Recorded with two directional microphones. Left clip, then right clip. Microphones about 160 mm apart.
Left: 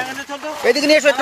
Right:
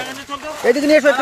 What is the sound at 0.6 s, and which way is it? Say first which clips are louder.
Speech: right 1 dB; 30° right (ahead or behind).